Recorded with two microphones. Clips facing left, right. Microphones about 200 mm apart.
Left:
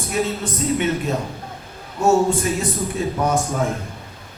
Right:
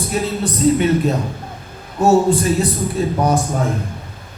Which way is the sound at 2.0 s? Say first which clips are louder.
Right 3 dB; 35° right (ahead or behind).